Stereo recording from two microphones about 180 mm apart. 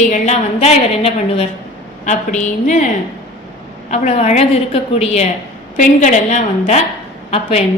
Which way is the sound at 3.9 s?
40° left (ahead or behind).